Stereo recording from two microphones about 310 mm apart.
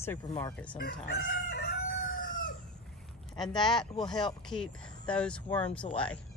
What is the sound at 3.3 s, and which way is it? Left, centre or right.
Speech, centre.